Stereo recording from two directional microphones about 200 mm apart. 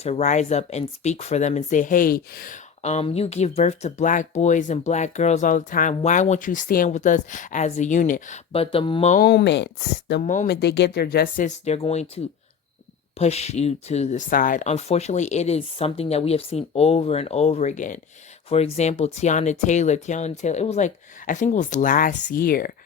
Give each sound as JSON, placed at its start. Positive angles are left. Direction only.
{"t": 0.0, "sound": "speech", "side_deg": 35}
{"t": 9.2, "sound": "speech", "side_deg": 55}
{"t": 10.1, "sound": "speech", "side_deg": 40}
{"t": 10.5, "sound": "speech", "side_deg": 55}